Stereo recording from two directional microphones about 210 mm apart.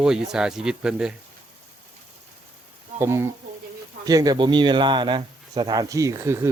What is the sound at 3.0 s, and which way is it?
A man's voice, 15° right (ahead or behind).